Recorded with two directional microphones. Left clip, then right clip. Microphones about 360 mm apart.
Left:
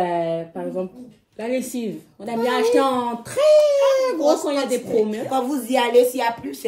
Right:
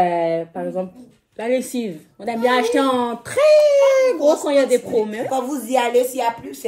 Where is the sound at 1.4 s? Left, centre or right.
Right.